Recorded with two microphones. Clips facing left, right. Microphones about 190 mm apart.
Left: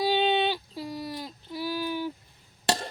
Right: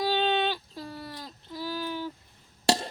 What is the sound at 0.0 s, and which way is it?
Female singing, 15° left (ahead or behind).